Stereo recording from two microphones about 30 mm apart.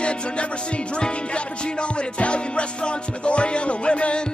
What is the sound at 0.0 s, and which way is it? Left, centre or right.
Music, left.